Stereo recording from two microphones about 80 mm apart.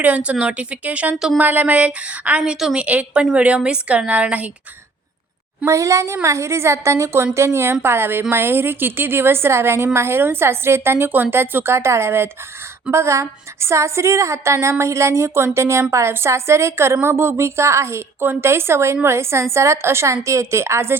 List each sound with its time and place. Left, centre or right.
0.0 s a woman's voice: centre
2.8 s a woman's voice: centre
5.6 s a woman's voice: right